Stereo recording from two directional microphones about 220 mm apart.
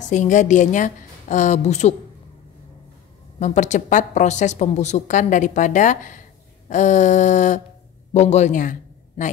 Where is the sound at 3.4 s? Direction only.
35° left (ahead or behind).